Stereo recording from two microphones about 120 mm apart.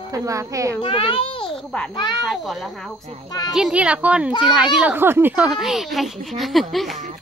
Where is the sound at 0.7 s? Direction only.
50° left (ahead or behind).